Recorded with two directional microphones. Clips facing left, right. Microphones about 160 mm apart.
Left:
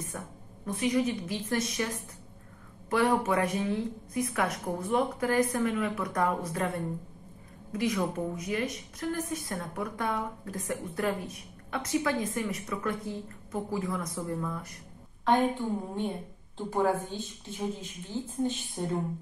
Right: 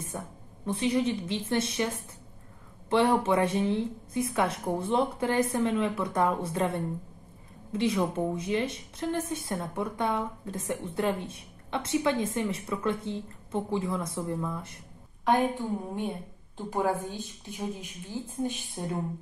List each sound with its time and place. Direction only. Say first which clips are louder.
0.1 s a woman's voice: right 2 dB; 25° right (ahead or behind)
2.9 s a woman's voice: right 2 dB; 25° right (ahead or behind)
15.2 s a woman's voice: even; 10° right (ahead or behind)